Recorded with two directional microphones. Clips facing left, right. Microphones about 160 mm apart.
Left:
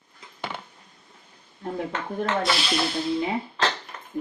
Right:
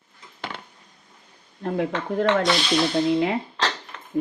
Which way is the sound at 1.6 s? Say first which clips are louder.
Right 5 dB; 90° right.